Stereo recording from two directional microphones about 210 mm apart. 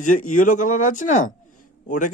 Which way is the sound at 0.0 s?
40° left (ahead or behind).